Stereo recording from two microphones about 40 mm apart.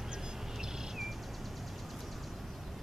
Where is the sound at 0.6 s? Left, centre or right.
Centre.